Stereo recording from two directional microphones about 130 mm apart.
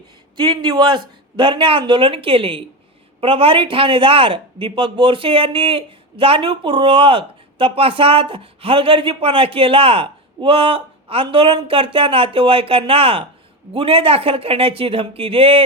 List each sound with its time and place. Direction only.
0.3 s a man's voice: 35° right (ahead or behind)